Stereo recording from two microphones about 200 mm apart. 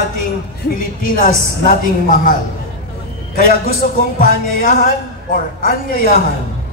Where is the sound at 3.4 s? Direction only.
45° left (ahead or behind).